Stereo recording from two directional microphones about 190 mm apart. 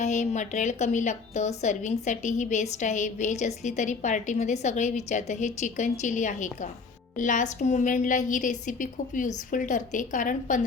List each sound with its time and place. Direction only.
0.0 s a woman's voice: 40° left (ahead or behind)